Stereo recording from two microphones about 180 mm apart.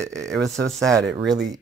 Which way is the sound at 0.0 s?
15° right (ahead or behind).